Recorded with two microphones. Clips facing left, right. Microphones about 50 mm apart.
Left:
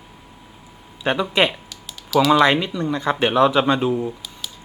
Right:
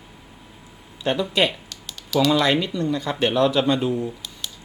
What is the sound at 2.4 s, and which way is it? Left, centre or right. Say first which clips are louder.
Speech: left 3 dB; centre.